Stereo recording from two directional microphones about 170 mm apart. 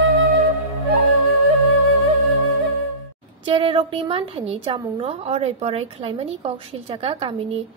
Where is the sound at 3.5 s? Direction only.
35° right (ahead or behind).